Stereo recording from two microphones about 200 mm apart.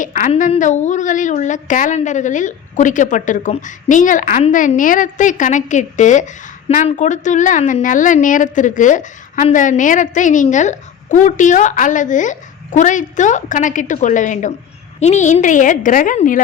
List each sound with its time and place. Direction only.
0.0 s a woman's voice: 40° left (ahead or behind)